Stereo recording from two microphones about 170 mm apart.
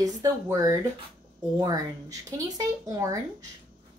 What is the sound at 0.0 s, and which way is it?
Speech, 20° right (ahead or behind).